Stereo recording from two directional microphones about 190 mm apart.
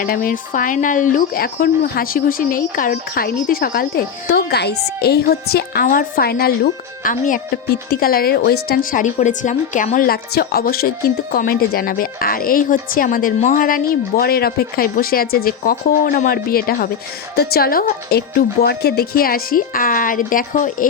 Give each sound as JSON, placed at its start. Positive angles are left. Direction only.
{"t": 0.0, "sound": "speech", "side_deg": 45}